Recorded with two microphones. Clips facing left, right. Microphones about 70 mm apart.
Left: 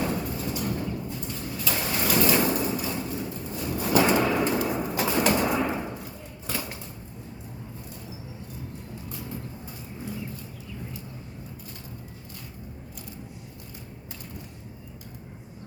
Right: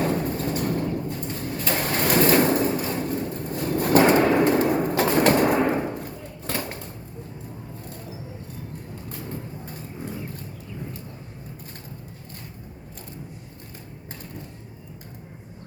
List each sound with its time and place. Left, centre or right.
0.0 s vehicle: right
9.0 s vehicle: right